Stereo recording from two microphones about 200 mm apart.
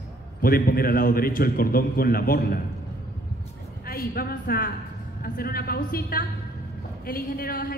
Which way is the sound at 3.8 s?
50° left (ahead or behind).